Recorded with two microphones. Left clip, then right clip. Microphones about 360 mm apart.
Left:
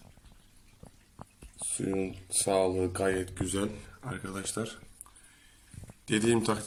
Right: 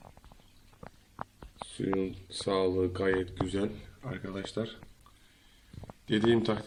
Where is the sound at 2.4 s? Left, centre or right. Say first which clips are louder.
Left 1 dB; left.